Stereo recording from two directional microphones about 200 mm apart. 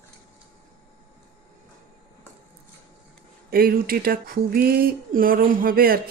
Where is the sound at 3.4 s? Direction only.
50° right (ahead or behind).